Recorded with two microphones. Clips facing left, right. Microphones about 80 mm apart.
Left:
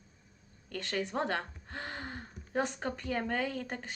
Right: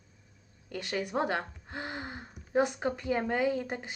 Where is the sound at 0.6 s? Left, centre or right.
Centre.